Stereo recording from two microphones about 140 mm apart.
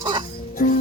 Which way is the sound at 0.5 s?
90° left.